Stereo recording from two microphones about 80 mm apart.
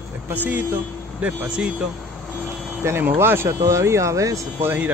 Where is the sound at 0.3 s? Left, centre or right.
Right.